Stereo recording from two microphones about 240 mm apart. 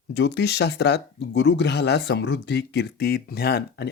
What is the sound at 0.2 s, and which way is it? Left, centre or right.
Speech, left.